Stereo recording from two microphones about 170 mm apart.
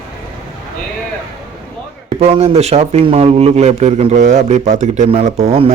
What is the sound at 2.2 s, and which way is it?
A man's voice, 35° right (ahead or behind).